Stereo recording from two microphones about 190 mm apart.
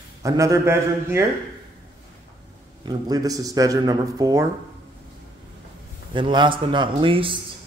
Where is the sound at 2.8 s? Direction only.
20° right (ahead or behind).